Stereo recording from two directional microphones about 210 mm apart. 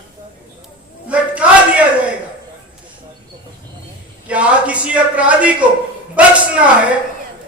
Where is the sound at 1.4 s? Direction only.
5° right (ahead or behind).